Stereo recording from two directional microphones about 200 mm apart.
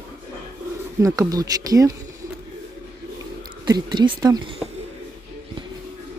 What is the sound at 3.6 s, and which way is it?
Speech, 20° right (ahead or behind).